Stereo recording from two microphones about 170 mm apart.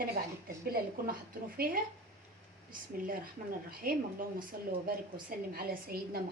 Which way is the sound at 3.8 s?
60° right (ahead or behind).